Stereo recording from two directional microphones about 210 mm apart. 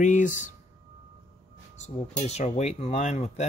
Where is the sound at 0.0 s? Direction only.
35° left (ahead or behind).